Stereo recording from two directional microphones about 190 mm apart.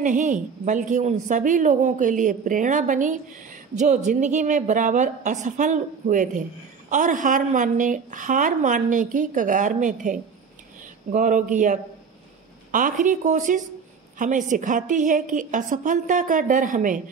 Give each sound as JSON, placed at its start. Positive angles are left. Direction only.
{"t": 0.0, "sound": "a woman's voice", "side_deg": -40}